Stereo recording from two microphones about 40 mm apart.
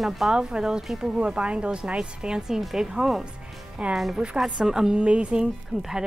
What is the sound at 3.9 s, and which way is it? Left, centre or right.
Speech, centre.